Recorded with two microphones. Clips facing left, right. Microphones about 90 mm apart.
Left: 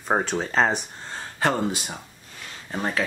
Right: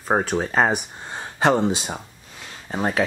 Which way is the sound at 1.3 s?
20° right (ahead or behind).